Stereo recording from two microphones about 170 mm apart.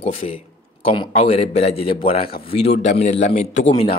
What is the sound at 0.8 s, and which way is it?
A man's voice, 35° left (ahead or behind).